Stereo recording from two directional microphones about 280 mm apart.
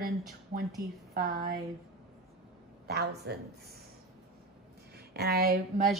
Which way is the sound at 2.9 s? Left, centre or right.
Right.